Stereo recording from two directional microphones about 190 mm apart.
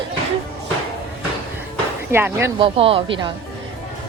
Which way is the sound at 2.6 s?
30° right (ahead or behind).